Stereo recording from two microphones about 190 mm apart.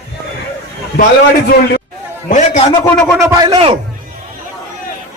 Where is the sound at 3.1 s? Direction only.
15° right (ahead or behind).